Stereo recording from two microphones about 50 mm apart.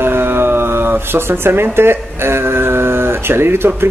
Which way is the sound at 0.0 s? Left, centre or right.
Right.